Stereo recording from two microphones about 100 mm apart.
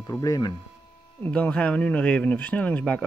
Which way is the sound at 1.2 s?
15° left (ahead or behind).